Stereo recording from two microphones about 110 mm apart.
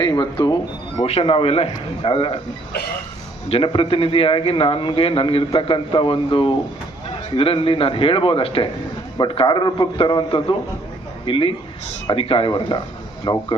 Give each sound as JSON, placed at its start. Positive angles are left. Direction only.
{"t": 0.0, "sound": "speech", "side_deg": 35}
{"t": 0.9, "sound": "a man's voice", "side_deg": 65}
{"t": 3.5, "sound": "a man's voice", "side_deg": 55}